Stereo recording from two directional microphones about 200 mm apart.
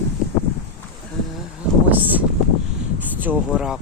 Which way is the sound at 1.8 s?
10° right (ahead or behind).